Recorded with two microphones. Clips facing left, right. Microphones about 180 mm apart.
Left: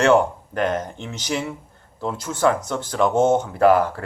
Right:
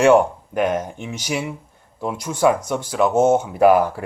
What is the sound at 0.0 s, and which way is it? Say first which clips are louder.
Speech: right 3 dB; 10° right (ahead or behind).